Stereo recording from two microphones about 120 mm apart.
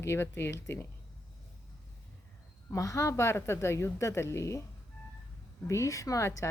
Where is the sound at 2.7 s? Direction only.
25° left (ahead or behind).